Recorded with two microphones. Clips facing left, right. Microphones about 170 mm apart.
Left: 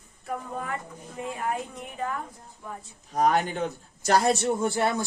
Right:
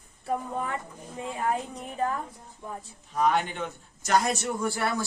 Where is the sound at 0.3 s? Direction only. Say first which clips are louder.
Right 2 dB; 30° right (ahead or behind).